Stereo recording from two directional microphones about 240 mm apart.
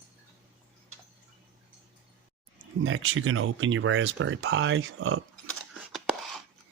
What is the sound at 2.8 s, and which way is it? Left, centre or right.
Speech, right.